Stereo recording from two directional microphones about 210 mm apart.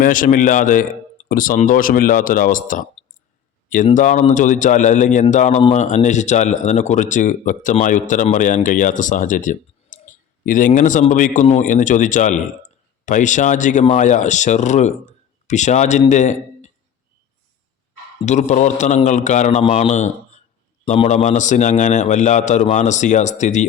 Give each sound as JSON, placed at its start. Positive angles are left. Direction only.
{"t": 0.0, "sound": "speech", "side_deg": 40}
{"t": 3.8, "sound": "a man's voice", "side_deg": 35}
{"t": 18.3, "sound": "speech", "side_deg": 35}